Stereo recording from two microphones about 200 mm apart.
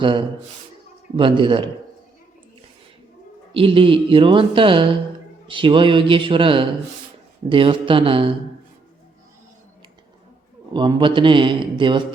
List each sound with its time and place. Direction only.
0.0 s speech: 25° right (ahead or behind)
3.5 s speech: 25° right (ahead or behind)
10.8 s speech: 25° right (ahead or behind)